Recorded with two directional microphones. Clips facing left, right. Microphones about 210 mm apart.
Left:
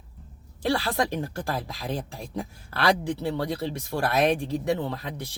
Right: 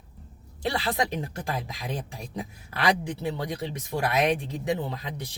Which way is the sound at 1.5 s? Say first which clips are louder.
Left 2 dB; 15° right (ahead or behind).